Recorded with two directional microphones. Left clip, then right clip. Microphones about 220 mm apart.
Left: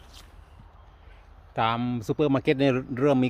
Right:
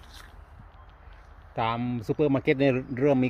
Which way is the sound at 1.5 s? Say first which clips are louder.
Left 3 dB; 20° left (ahead or behind).